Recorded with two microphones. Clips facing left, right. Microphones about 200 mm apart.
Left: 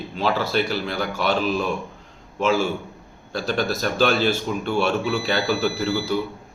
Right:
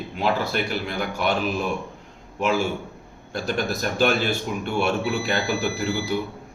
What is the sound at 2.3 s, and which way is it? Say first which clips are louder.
A man's voice: left 2 dB; 15° right (ahead or behind).